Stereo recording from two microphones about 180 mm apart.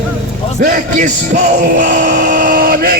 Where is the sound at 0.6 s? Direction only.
50° right (ahead or behind).